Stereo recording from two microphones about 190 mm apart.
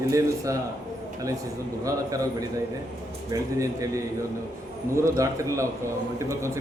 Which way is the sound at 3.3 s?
15° right (ahead or behind).